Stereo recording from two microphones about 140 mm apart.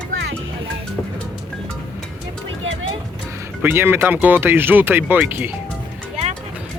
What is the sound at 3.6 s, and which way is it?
Speech, 15° right (ahead or behind).